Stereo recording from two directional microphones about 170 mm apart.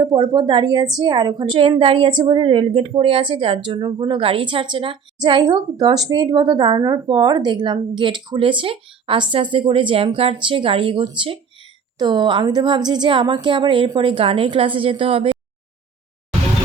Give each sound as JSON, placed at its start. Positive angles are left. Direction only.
{"t": 0.0, "sound": "a woman's voice", "side_deg": -25}